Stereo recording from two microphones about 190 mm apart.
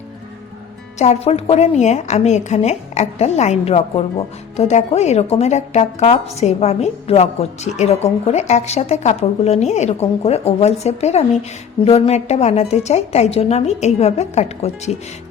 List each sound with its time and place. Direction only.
0.9 s a woman's voice: 35° left (ahead or behind)